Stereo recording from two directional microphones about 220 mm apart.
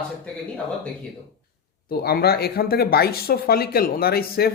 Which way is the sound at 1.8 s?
45° left (ahead or behind).